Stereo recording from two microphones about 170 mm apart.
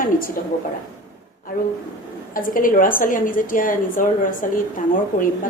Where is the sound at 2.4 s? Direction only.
55° left (ahead or behind).